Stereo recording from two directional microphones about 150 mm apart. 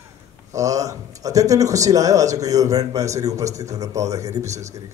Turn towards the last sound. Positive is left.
turn(degrees=-20)  # may be behind; listen again after turning